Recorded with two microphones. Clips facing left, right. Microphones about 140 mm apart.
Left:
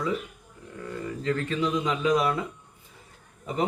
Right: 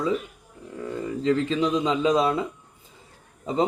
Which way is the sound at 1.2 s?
25° right (ahead or behind).